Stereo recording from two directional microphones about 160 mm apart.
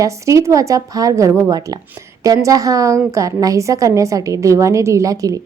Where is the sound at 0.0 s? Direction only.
20° right (ahead or behind).